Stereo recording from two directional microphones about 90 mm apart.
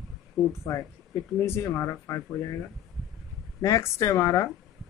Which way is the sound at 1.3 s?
30° left (ahead or behind).